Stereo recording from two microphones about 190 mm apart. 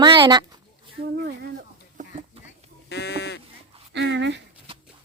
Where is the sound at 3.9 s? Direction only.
70° right (ahead or behind).